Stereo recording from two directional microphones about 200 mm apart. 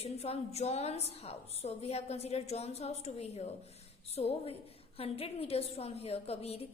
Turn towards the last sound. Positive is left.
turn(degrees=30)  # may be behind; listen again after turning